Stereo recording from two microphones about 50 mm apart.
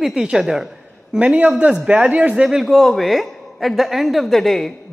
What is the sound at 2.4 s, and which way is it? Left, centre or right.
Speech, centre.